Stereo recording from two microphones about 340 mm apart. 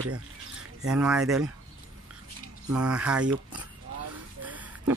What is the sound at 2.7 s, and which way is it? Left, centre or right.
Speech, centre.